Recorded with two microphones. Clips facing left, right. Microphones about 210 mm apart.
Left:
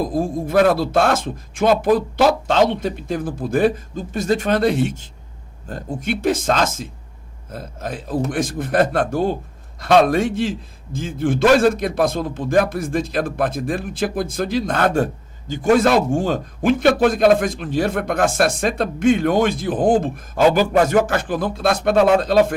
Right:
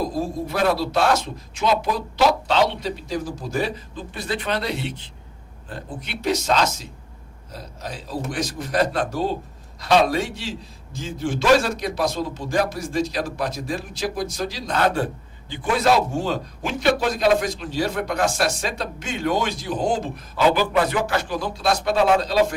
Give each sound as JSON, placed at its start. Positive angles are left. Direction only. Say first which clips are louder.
{"t": 0.0, "sound": "a man's voice", "louder": "left 4 dB", "side_deg": 50}